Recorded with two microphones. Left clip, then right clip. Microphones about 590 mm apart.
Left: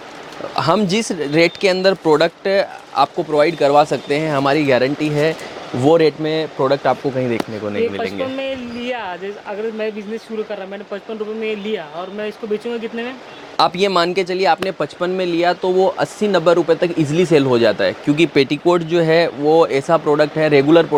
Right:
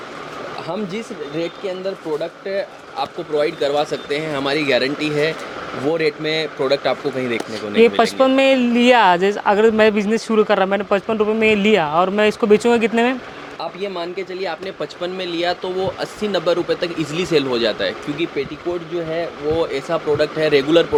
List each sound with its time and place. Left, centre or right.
0.5 s speech: left
7.8 s speech: right
13.6 s speech: left
18.3 s speech: left